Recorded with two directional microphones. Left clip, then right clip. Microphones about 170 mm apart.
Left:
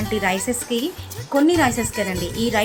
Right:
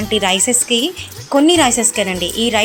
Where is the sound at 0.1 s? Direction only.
20° right (ahead or behind).